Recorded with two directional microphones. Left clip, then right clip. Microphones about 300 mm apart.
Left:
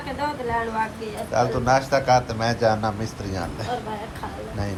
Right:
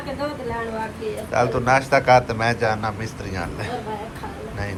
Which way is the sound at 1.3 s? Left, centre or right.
Centre.